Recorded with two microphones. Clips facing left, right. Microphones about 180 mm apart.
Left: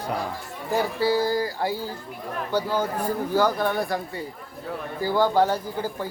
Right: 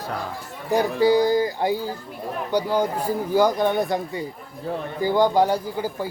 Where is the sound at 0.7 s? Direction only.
15° right (ahead or behind).